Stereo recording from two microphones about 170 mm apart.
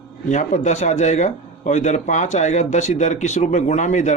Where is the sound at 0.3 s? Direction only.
45° left (ahead or behind).